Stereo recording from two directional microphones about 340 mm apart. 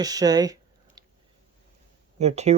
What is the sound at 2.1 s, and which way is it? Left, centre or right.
Speech, centre.